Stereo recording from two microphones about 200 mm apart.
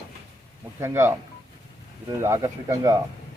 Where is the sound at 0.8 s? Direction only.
15° right (ahead or behind).